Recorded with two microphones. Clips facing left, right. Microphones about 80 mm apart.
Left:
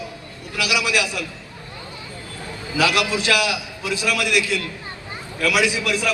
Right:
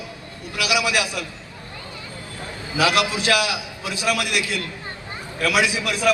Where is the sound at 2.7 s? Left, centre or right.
Right.